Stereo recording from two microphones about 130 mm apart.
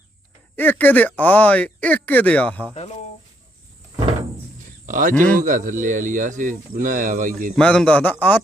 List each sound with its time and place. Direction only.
0.5 s speech: 15° left (ahead or behind)
4.9 s speech: 85° right
7.5 s speech: 5° left (ahead or behind)